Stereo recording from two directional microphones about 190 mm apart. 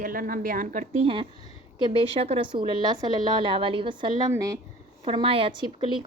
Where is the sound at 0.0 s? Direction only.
45° right (ahead or behind).